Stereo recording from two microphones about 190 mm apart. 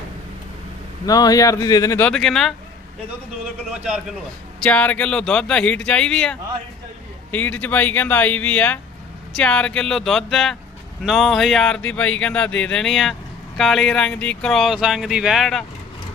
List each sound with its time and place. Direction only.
1.0 s speech: 20° left (ahead or behind)
2.0 s speech: centre (ahead or behind)
4.6 s speech: 5° left (ahead or behind)